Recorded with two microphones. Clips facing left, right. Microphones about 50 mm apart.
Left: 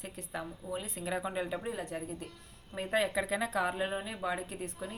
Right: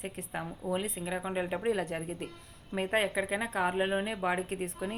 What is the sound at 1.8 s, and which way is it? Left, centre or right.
Speech, right.